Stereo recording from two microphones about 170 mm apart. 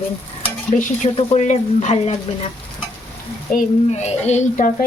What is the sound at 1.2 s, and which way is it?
Speech, 40° left (ahead or behind).